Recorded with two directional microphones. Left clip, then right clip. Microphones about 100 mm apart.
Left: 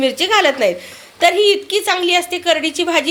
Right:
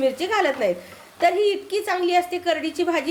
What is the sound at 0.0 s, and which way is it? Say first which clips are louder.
A woman's voice: left 7 dB; 25° left (ahead or behind).